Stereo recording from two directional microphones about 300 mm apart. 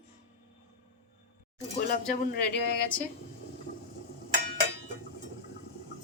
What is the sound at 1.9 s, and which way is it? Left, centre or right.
Speech, left.